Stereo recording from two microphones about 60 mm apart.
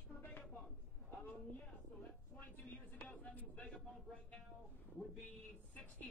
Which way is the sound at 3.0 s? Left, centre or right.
Left.